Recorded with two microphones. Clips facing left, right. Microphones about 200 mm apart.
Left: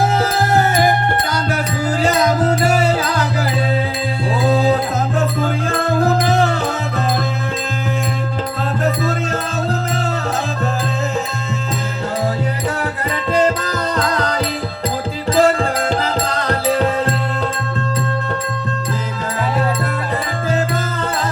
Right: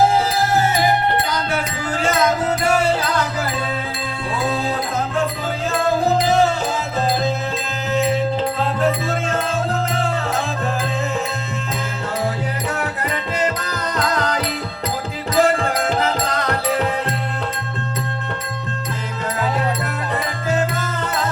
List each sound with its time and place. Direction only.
0.5 s music: 55° left (ahead or behind)
2.0 s music: 35° left (ahead or behind)
4.4 s music: 35° left (ahead or behind)
8.8 s music: 40° left (ahead or behind)
13.9 s music: 35° left (ahead or behind)